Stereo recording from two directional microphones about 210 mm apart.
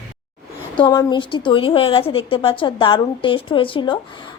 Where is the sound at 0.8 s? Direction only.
20° left (ahead or behind).